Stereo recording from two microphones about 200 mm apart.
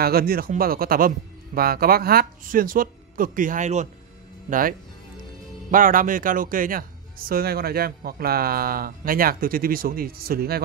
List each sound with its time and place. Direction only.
0.0 s speech: 50° right (ahead or behind)